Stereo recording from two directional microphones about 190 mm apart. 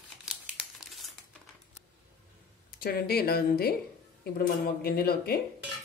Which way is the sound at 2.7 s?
50° left (ahead or behind).